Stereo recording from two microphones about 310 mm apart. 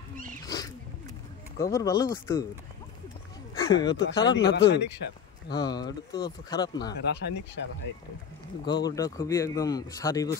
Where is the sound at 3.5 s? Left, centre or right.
Centre.